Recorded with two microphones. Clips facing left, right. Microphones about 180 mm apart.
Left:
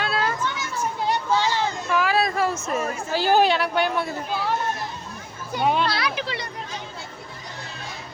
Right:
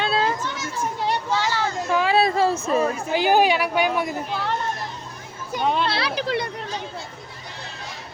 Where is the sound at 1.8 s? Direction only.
25° right (ahead or behind).